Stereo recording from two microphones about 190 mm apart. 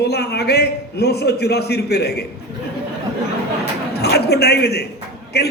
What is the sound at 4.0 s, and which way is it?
A man's voice, 60° left (ahead or behind).